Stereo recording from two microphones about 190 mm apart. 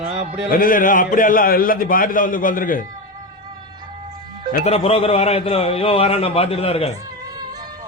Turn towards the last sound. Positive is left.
turn(degrees=-20)  # may be behind; listen again after turning